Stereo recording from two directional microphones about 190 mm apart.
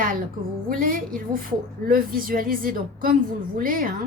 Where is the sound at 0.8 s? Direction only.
45° right (ahead or behind).